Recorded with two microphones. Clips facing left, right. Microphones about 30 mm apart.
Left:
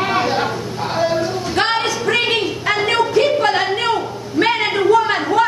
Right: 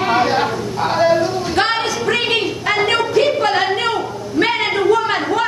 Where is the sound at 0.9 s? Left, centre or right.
Centre.